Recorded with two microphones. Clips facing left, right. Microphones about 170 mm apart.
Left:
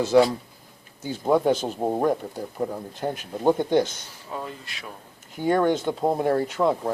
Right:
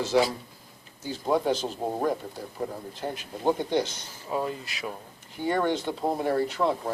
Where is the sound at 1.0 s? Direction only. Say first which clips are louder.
Left 5 dB; 50° left (ahead or behind).